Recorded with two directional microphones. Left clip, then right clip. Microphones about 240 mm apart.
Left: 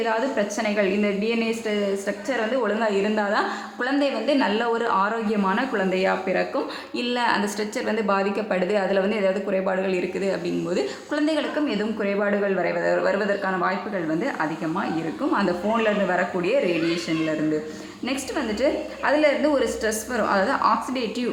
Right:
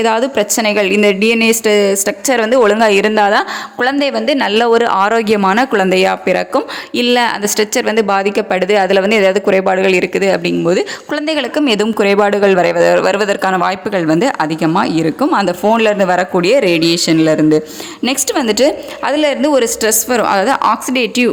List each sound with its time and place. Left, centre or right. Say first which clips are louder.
0.0 s a woman's voice: right 10 dB; right